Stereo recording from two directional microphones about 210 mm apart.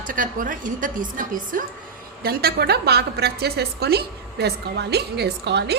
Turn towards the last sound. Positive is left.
turn(degrees=-55)  # may be behind; listen again after turning